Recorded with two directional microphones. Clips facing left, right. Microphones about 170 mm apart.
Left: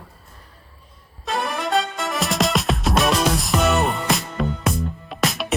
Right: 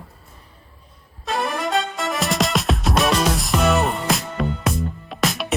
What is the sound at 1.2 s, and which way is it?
Music, centre (ahead or behind).